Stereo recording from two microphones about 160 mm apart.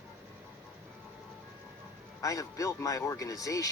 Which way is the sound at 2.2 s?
20° left (ahead or behind).